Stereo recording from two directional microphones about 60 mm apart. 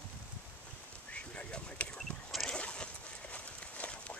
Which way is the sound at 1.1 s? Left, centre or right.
Left.